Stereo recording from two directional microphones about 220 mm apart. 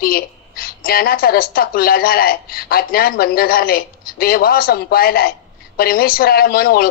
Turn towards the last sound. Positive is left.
turn(degrees=40)  # may be behind; listen again after turning